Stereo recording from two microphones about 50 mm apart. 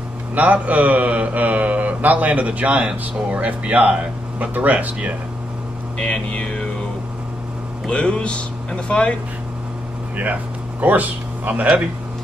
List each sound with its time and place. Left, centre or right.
0.3 s mantra: right
5.9 s speech: left
7.9 s speech: left
10.1 s speech: right